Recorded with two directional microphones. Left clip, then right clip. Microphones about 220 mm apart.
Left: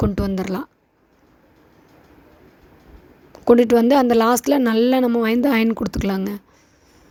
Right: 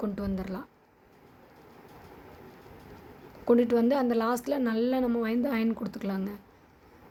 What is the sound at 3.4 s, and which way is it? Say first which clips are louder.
A woman's voice: left 10 dB; 40° left (ahead or behind).